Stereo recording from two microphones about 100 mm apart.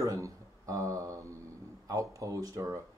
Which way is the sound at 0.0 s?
30° right (ahead or behind).